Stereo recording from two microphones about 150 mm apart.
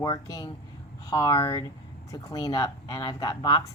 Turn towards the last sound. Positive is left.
turn(degrees=25)  # may be behind; listen again after turning